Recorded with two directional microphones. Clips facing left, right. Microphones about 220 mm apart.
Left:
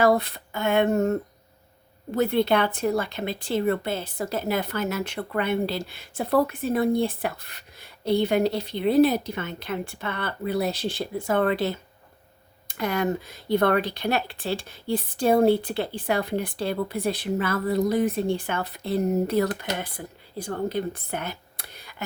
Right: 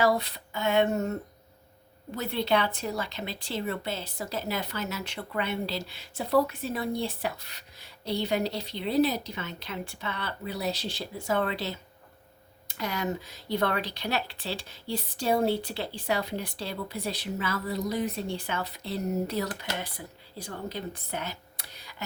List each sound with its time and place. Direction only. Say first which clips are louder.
0.0 s a woman's voice: left 5 dB; 55° left (ahead or behind)